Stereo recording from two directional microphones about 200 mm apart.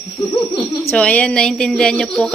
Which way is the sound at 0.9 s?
5° left (ahead or behind).